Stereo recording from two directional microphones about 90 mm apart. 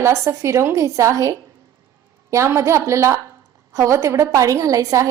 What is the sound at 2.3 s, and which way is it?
A woman's voice, 30° right (ahead or behind).